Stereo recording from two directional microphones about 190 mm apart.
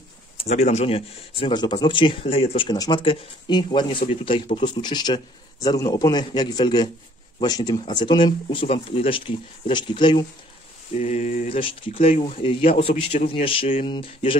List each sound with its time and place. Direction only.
0.4 s speech: 35° left (ahead or behind)
11.0 s mantra: 40° left (ahead or behind)
11.4 s speech: 30° left (ahead or behind)